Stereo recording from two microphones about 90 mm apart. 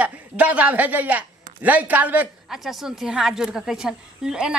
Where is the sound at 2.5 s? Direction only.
5° right (ahead or behind).